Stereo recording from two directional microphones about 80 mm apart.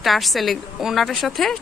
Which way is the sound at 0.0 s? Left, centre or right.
Centre.